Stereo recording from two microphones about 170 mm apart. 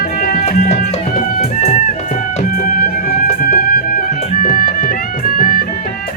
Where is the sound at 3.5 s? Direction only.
60° left (ahead or behind).